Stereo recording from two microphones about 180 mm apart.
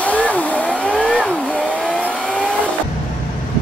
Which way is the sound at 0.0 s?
10° left (ahead or behind).